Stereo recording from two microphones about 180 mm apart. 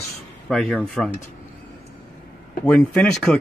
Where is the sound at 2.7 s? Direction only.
5° left (ahead or behind).